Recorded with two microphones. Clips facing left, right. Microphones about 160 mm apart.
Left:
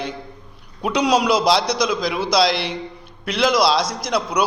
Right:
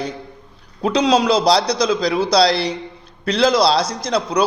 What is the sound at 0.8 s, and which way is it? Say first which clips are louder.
A man's voice: right 2 dB; 25° right (ahead or behind).